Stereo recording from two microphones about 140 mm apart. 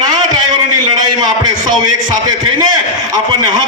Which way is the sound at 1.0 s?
30° right (ahead or behind).